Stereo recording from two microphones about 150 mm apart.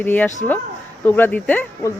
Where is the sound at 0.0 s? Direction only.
10° left (ahead or behind).